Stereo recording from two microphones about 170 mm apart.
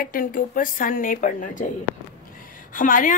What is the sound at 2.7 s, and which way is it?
Speech, 55° left (ahead or behind).